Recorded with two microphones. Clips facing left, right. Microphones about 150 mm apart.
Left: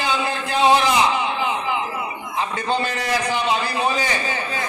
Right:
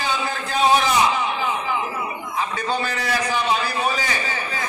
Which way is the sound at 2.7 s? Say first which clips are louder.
Left 3 dB; 20° left (ahead or behind).